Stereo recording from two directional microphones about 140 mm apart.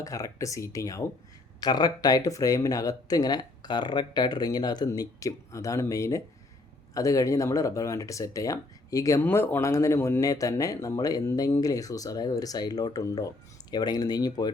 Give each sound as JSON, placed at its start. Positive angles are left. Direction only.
{"t": 0.0, "sound": "speech", "side_deg": 25}